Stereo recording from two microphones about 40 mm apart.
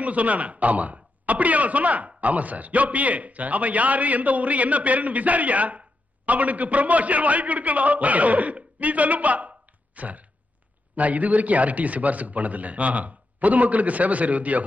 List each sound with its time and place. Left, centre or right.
0.0 s speech: right